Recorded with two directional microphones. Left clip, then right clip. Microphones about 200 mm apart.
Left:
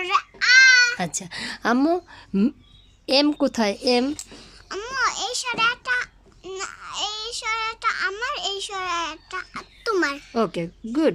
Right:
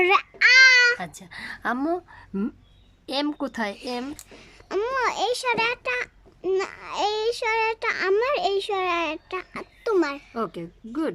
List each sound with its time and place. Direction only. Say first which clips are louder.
0.0 s babbling: right 3 dB; 20° right (ahead or behind)
0.9 s speech: left 6 dB; 10° left (ahead or behind)
4.3 s a child's voice: right 3 dB; 15° right (ahead or behind)
10.3 s speech: left 6 dB; 5° left (ahead or behind)